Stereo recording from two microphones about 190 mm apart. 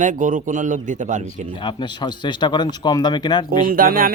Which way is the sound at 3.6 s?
50° right (ahead or behind).